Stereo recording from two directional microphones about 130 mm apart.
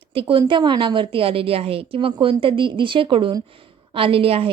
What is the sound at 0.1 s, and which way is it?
A woman's voice, 45° right (ahead or behind).